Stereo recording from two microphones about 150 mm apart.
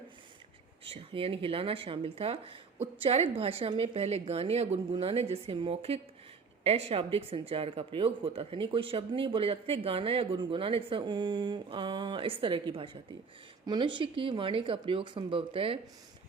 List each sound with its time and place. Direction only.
0.9 s a woman's voice: 40° right (ahead or behind)